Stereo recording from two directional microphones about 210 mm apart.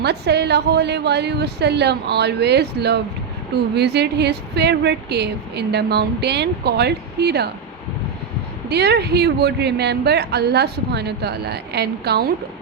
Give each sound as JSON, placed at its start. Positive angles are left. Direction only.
{"t": 0.0, "sound": "speech", "side_deg": -50}
{"t": 8.7, "sound": "speech", "side_deg": -50}